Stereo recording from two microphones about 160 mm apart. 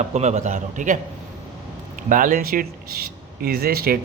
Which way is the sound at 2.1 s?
60° right (ahead or behind).